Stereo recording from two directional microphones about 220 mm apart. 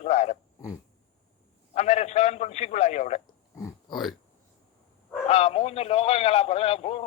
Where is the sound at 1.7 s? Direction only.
30° left (ahead or behind).